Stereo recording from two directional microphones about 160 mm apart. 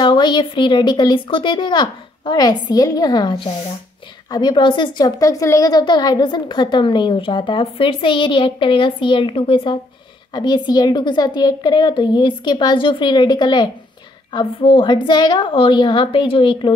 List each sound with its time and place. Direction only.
0.0 s a woman's voice: 30° left (ahead or behind)